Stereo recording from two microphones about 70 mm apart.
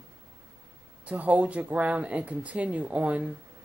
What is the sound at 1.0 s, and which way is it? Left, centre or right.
Speech, right.